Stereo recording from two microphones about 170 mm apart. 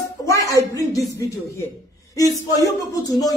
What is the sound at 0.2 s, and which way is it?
A woman's voice, 20° left (ahead or behind).